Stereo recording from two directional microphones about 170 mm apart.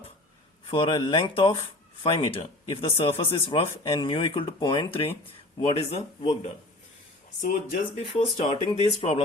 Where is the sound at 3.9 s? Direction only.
25° left (ahead or behind).